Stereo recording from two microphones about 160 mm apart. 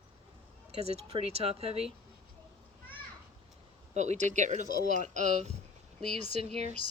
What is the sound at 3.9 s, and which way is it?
Speech, 45° right (ahead or behind).